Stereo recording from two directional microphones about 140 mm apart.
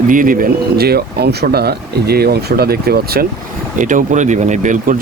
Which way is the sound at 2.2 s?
90° right.